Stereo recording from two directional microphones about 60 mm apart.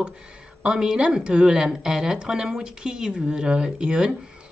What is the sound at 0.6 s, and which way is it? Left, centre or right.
A woman's voice, centre.